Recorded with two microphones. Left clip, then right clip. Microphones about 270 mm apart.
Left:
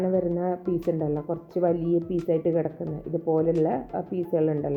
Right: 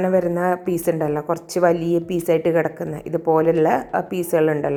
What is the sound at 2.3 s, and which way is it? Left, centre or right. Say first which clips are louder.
A woman's voice: right 7 dB; centre.